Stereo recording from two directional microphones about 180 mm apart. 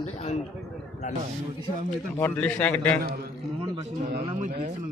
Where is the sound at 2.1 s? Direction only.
10° left (ahead or behind).